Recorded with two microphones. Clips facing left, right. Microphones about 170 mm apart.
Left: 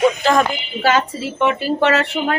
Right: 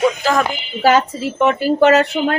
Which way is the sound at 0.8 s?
40° right (ahead or behind).